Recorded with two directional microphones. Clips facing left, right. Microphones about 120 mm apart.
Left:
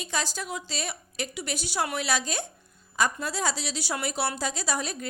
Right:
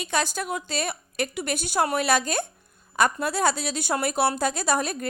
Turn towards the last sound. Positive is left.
turn(degrees=-55)  # may be behind; listen again after turning